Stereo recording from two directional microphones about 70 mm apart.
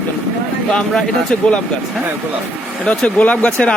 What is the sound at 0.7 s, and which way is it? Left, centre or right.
Speech, centre.